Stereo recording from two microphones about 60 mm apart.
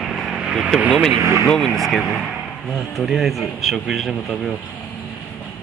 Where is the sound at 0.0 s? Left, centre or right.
Centre.